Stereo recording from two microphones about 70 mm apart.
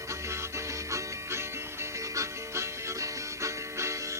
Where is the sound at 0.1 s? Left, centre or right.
Right.